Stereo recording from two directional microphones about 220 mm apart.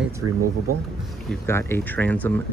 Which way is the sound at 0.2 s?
90° right.